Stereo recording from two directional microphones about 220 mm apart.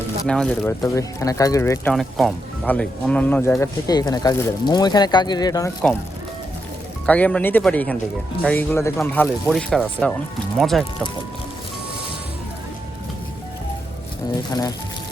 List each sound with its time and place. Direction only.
0.3 s speech: 5° left (ahead or behind)
1.9 s speech: centre (ahead or behind); by 5.7 s 15° left (ahead or behind)
7.0 s speech: 5° left (ahead or behind)